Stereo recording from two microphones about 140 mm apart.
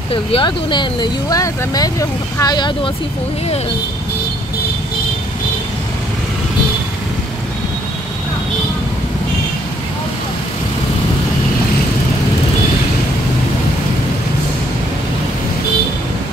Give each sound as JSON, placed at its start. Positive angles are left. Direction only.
{"t": 0.1, "sound": "speech", "side_deg": 40}